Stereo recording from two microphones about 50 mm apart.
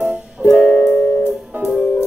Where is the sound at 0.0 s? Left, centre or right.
Right.